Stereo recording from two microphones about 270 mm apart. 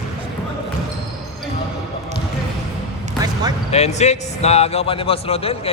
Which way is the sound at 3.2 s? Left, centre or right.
Centre.